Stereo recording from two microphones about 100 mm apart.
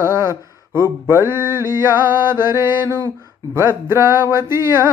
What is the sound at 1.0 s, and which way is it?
Music, 25° right (ahead or behind).